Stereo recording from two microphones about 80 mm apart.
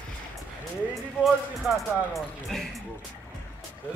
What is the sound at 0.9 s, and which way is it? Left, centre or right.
Speech, centre.